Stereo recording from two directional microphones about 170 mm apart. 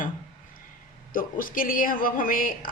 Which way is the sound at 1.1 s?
55° left (ahead or behind).